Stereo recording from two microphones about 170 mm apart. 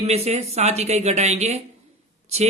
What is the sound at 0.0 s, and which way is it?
Speech, 40° right (ahead or behind).